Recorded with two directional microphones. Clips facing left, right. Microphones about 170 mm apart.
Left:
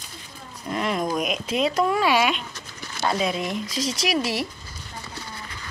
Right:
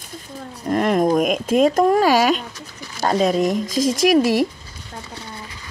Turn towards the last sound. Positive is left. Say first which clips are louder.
# right 10 dB
turn(degrees=-50)  # may be behind; listen again after turning